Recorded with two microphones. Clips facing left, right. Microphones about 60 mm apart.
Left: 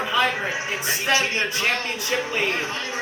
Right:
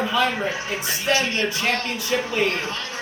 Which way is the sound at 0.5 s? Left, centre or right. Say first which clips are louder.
Left 1 dB; centre.